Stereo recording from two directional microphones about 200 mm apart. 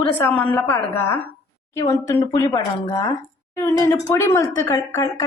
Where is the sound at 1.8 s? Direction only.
15° left (ahead or behind).